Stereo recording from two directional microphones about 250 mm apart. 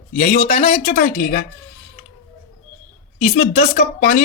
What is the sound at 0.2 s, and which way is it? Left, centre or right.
Speech, left.